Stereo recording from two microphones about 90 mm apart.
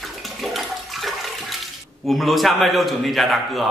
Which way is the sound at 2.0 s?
Centre (ahead or behind).